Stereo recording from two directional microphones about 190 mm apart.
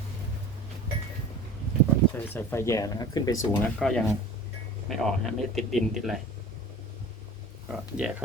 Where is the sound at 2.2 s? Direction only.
10° left (ahead or behind).